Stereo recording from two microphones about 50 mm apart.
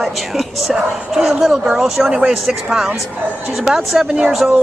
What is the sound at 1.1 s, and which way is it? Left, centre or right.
Speech, centre.